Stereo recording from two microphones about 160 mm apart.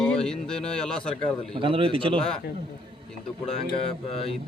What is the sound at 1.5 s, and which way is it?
Speech, 35° right (ahead or behind).